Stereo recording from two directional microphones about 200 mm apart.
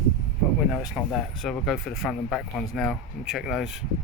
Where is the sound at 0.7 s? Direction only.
Centre (ahead or behind).